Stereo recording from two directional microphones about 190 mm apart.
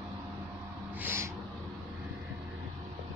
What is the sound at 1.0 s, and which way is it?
Owl, 15° right (ahead or behind).